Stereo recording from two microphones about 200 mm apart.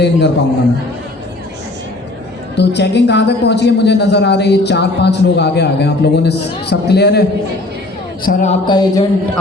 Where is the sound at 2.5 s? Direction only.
60° left (ahead or behind).